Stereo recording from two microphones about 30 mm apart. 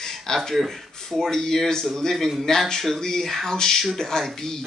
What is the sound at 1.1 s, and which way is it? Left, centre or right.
Speech, centre.